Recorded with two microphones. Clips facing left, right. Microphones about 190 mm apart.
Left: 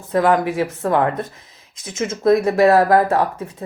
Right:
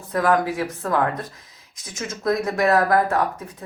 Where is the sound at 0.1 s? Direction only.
25° left (ahead or behind).